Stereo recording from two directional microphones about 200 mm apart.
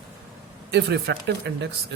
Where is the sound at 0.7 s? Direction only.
55° right (ahead or behind).